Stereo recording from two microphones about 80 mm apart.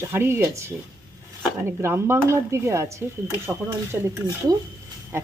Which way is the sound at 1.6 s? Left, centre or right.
Right.